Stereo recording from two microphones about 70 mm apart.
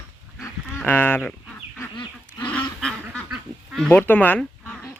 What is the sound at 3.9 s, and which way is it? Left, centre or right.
Speech, left.